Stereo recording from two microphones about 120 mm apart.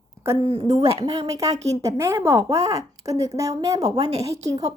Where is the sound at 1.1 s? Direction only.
30° right (ahead or behind).